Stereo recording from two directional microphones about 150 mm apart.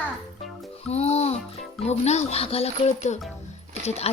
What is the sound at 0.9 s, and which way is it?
Music, 45° left (ahead or behind).